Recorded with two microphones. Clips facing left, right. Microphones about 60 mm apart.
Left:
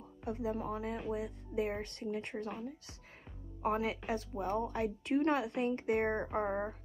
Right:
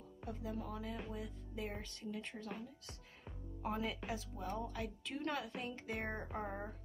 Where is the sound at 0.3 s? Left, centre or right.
Left.